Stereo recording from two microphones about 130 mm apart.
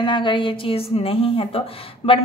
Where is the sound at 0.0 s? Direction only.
35° left (ahead or behind).